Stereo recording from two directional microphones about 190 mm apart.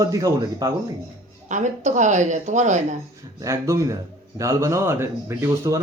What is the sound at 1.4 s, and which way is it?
Speech, 40° right (ahead or behind).